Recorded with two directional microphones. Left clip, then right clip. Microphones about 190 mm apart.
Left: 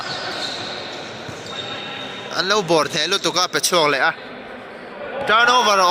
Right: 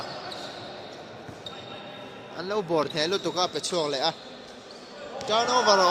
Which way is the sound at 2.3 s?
10° right (ahead or behind).